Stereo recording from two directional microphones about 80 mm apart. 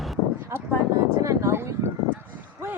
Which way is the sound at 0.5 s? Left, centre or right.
Right.